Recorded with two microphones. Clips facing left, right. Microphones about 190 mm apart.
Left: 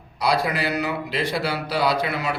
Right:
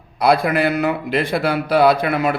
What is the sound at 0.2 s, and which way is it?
A man's voice, 55° right (ahead or behind).